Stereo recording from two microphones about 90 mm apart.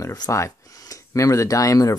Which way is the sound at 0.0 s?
40° left (ahead or behind).